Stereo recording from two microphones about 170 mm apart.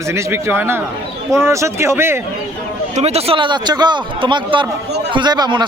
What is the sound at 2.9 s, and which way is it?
Speech, 40° right (ahead or behind).